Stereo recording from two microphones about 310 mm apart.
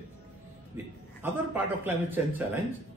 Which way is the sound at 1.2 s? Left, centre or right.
Centre.